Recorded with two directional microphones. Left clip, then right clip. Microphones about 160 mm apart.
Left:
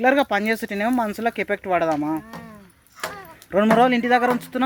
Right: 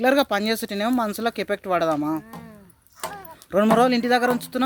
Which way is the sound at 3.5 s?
10° right (ahead or behind).